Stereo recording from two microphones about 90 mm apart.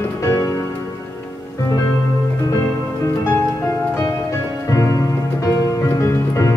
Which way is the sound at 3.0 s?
30° left (ahead or behind).